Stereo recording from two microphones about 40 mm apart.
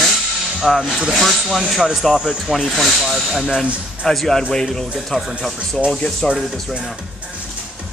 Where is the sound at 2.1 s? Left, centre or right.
Centre.